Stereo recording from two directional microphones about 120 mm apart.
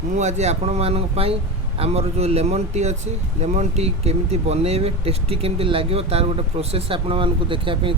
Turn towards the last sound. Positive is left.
turn(degrees=-45)  # may be behind; listen again after turning